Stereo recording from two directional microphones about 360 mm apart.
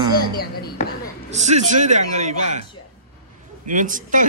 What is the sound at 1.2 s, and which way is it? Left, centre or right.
Speech, centre.